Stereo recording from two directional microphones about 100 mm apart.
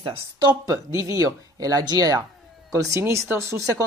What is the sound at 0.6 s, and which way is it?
Speech, 35° right (ahead or behind).